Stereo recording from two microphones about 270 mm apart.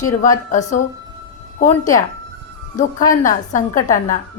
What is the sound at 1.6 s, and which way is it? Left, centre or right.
A woman's voice, left.